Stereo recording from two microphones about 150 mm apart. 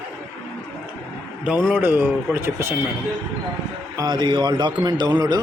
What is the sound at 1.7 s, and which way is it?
Speech, 15° right (ahead or behind).